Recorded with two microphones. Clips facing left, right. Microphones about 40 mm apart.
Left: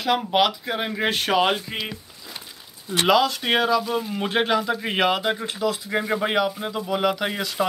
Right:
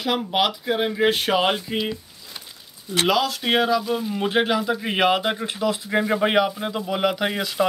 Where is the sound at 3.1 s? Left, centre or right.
Centre.